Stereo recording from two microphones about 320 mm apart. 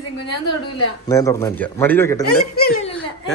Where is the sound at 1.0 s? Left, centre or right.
Centre.